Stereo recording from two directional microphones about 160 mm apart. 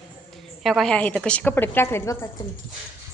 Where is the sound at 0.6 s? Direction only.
Centre (ahead or behind); by 2.3 s 15° left (ahead or behind).